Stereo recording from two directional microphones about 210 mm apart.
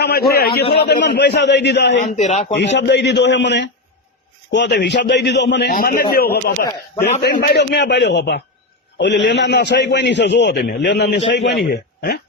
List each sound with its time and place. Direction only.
0.0 s a man's voice: 50° left (ahead or behind)
2.0 s a man's voice: 35° left (ahead or behind)
2.6 s a man's voice: 55° left (ahead or behind)